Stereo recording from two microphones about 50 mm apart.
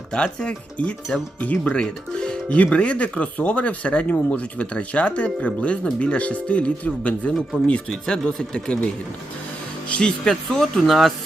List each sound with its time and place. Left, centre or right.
0.1 s speech: left
1.7 s speech: centre
7.7 s speech: centre
9.9 s speech: centre